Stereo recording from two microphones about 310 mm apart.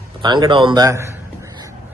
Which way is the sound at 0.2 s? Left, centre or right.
Centre.